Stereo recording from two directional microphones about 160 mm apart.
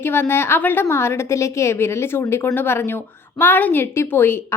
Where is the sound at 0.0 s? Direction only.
15° left (ahead or behind).